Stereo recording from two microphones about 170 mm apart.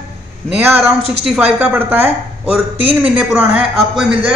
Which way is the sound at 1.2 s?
5° right (ahead or behind).